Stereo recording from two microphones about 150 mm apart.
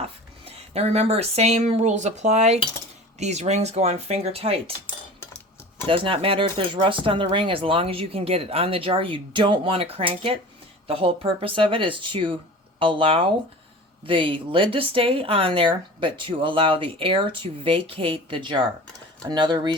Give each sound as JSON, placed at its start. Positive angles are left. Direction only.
{"t": 0.4, "sound": "speech", "side_deg": -45}
{"t": 5.9, "sound": "speech", "side_deg": -35}